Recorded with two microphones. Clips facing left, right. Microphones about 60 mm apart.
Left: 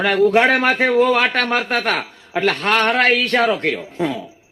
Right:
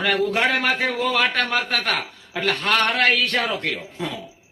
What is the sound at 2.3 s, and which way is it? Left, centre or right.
Speech, left.